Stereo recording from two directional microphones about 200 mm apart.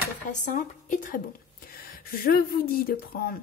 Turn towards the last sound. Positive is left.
turn(degrees=45)  # may be behind; listen again after turning